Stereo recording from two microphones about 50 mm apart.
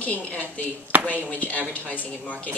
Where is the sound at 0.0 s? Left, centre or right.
Left.